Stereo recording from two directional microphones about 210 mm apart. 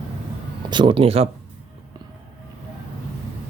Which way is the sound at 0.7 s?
25° right (ahead or behind).